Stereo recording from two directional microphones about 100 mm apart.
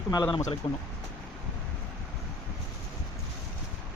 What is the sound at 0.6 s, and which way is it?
Speech, 60° left (ahead or behind).